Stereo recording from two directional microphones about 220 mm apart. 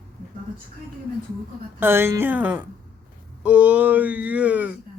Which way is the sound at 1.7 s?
10° right (ahead or behind).